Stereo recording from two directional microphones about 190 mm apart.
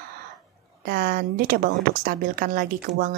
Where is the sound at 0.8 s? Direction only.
50° right (ahead or behind).